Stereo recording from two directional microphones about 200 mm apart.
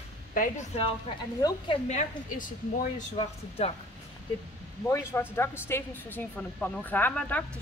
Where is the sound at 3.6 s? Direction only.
30° left (ahead or behind).